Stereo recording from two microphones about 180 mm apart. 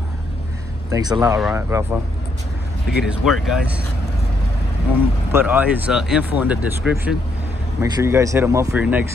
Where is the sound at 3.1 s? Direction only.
Centre (ahead or behind).